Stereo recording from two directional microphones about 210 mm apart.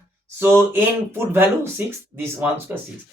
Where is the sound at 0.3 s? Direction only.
10° right (ahead or behind).